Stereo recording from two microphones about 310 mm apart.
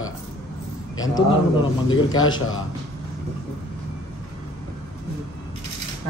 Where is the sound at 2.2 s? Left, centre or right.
Left.